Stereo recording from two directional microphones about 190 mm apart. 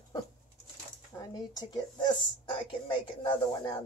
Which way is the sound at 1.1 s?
15° left (ahead or behind).